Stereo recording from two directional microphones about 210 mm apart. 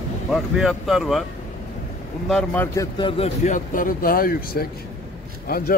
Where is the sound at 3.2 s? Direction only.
35° left (ahead or behind).